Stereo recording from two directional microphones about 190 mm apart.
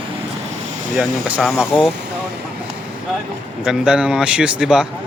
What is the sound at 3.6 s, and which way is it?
Speech, 5° right (ahead or behind).